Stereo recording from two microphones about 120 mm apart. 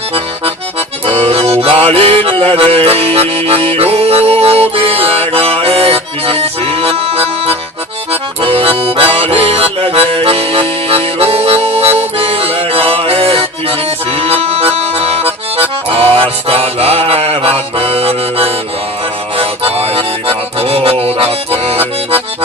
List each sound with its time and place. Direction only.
1.0 s accordion: 55° right (ahead or behind)
1.6 s music: 55° right (ahead or behind)
8.1 s accordion: 55° right (ahead or behind)
9.1 s music: 50° right (ahead or behind)